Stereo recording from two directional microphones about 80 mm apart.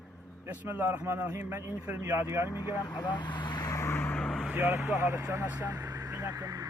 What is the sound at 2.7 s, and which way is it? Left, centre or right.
Speech, left.